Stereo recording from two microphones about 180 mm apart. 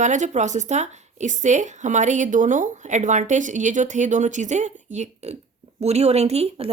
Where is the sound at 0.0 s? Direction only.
40° right (ahead or behind).